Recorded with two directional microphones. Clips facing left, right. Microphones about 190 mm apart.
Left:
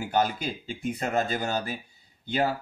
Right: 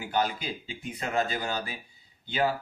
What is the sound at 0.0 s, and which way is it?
Speech, 45° left (ahead or behind).